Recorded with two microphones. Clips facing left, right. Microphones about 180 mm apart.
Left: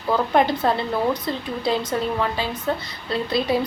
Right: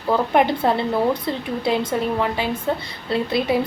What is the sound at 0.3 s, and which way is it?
Speech, 25° right (ahead or behind).